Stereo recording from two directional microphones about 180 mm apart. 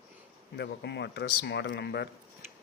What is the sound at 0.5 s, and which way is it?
Speech, 70° left (ahead or behind).